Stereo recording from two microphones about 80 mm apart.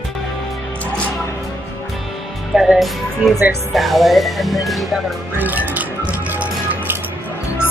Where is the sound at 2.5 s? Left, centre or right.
Centre.